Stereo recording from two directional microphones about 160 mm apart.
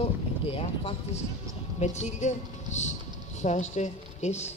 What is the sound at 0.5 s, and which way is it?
Speech, 35° left (ahead or behind).